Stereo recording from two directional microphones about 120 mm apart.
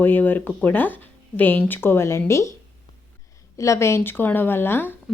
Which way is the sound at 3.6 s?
25° left (ahead or behind).